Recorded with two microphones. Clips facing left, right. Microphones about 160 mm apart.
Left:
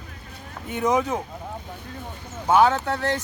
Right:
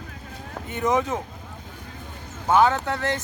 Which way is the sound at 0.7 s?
20° left (ahead or behind).